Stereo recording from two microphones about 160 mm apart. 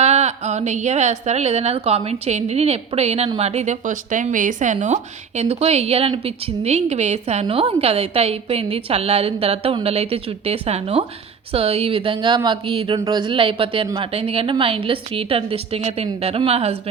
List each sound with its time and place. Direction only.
0.0 s a woman's voice: 45° right (ahead or behind); by 14.1 s 25° right (ahead or behind)
14.1 s speech: 40° right (ahead or behind)